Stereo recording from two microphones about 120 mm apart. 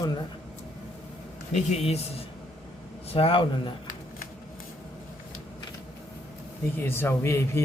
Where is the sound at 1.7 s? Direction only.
60° left (ahead or behind).